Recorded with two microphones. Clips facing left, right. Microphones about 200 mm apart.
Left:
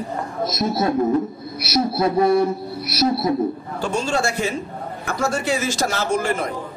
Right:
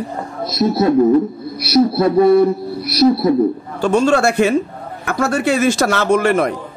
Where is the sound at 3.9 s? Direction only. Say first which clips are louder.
Right 9 dB; 60° right (ahead or behind).